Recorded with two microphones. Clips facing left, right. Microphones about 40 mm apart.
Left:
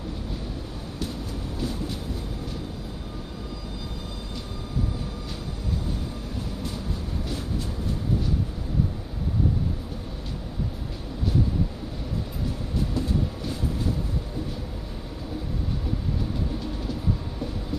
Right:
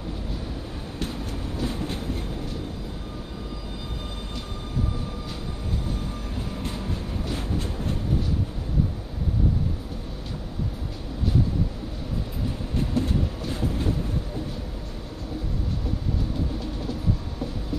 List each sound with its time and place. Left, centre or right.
1.6 s train: right
12.7 s train: right